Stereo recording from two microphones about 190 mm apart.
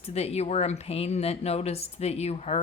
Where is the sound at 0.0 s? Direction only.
35° left (ahead or behind).